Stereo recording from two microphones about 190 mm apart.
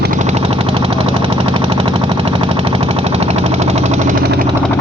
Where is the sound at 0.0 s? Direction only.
40° right (ahead or behind).